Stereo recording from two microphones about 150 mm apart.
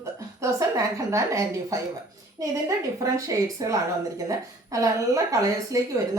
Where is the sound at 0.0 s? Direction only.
20° right (ahead or behind).